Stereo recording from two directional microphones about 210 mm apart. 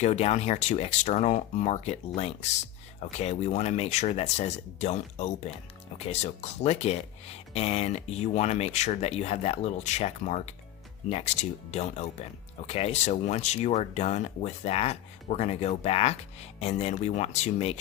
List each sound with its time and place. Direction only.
0.0 s speech: 30° left (ahead or behind)